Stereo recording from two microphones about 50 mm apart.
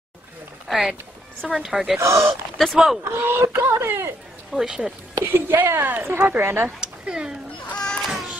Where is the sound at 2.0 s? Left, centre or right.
Right.